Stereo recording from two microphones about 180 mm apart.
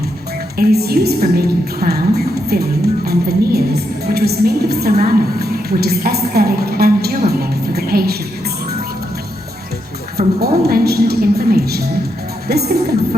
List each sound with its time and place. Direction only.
0.5 s music: 60° right (ahead or behind)
10.2 s a woman's voice: 45° right (ahead or behind)
10.7 s a woman's voice: 60° right (ahead or behind)